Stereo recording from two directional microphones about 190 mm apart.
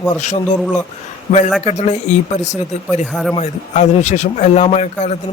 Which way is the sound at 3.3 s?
35° left (ahead or behind).